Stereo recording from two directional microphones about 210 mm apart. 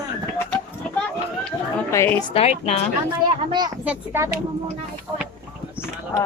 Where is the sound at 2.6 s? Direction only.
30° left (ahead or behind).